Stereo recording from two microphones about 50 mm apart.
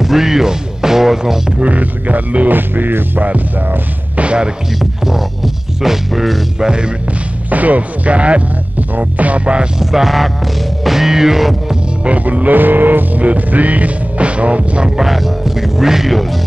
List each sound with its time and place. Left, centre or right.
0.0 s speech: centre
1.6 s music: right
3.3 s music: right
4.7 s music: centre
6.6 s music: centre
7.4 s music: right
9.8 s music: centre
12.0 s music: right
15.0 s music: centre